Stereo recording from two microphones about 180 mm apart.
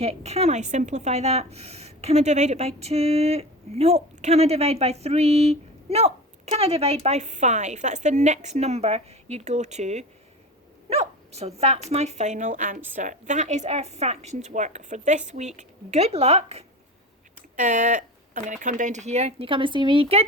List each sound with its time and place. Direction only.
0.0 s a woman's voice: 35° right (ahead or behind)